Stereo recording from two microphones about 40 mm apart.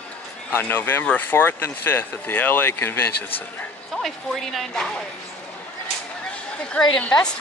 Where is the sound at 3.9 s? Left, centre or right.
Centre.